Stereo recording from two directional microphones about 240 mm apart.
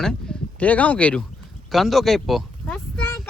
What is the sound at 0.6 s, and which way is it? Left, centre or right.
Speech, centre.